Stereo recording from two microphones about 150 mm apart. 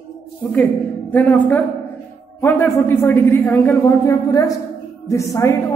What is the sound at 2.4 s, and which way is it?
A man's voice, 15° left (ahead or behind).